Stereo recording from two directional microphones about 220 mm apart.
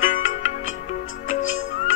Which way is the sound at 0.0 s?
35° left (ahead or behind).